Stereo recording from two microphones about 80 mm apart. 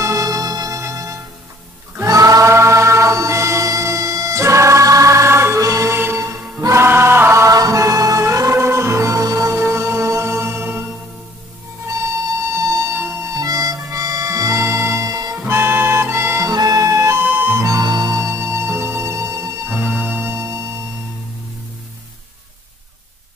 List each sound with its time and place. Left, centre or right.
0.0 s music: right
2.0 s choir: right
5.9 s music: right
7.5 s music: right
9.6 s music: right
12.9 s music: right
13.3 s harmonica: right
15.3 s music: right
16.4 s music: right
17.2 s music: right
17.6 s music: right
18.2 s music: right
19.7 s music: right